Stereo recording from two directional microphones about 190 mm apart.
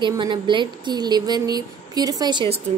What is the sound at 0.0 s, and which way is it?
A woman's voice, 25° right (ahead or behind).